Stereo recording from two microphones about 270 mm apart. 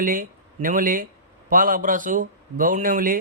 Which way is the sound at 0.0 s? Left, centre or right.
Right.